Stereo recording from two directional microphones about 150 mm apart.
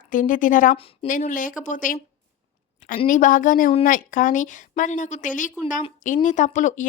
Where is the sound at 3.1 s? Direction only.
60° left (ahead or behind).